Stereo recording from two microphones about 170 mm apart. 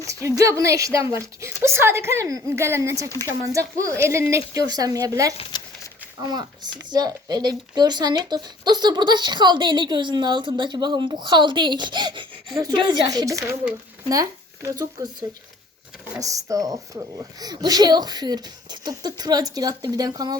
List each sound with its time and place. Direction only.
0.0 s speech: 20° right (ahead or behind)
5.4 s a sound: 25° left (ahead or behind)
6.3 s speech: 25° right (ahead or behind)
16.2 s speech: 20° right (ahead or behind)